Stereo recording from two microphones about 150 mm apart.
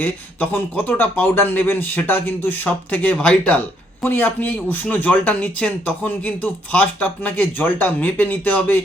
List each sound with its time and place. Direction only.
0.0 s speech: 10° left (ahead or behind)